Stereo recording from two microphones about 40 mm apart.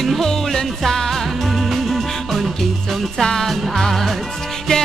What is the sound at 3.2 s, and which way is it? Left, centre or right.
Music, centre.